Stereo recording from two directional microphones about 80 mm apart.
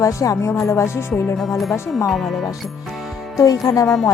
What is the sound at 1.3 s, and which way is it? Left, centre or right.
Speech, centre.